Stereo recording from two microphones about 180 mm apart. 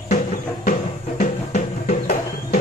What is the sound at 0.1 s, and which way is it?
Music, 45° left (ahead or behind).